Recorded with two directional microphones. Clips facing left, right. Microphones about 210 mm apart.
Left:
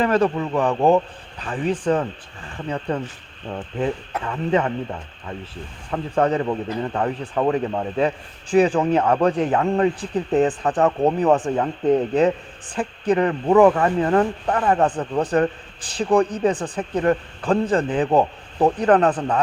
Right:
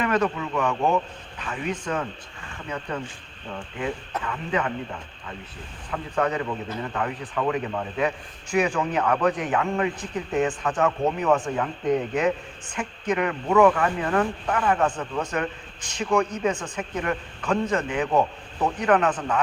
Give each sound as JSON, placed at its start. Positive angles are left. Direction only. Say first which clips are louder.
{"t": 0.0, "sound": "a man's voice", "louder": "left 5 dB", "side_deg": 30}
{"t": 5.9, "sound": "a man's voice", "louder": "left 5 dB", "side_deg": 30}